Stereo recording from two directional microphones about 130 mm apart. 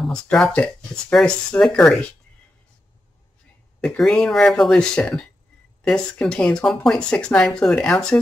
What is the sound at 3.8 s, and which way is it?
Speech, 5° left (ahead or behind).